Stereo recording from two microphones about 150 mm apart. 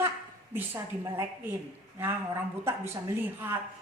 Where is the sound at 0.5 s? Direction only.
15° right (ahead or behind).